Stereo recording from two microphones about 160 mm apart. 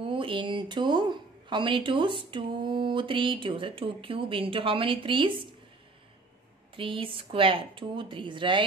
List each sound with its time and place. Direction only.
0.0 s speech: 35° right (ahead or behind)
6.7 s speech: 35° right (ahead or behind)